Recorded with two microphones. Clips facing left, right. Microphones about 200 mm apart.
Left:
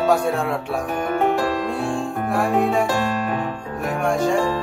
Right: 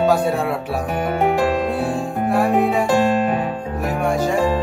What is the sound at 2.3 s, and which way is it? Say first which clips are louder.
Speech: right 2 dB; centre (ahead or behind).